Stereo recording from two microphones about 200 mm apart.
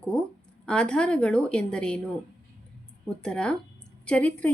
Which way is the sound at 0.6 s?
5° left (ahead or behind).